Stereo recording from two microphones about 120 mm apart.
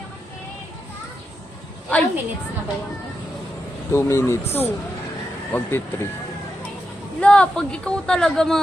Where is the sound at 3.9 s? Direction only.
20° left (ahead or behind).